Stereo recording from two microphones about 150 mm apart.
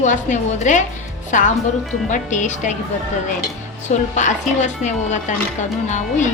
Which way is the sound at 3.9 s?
55° left (ahead or behind).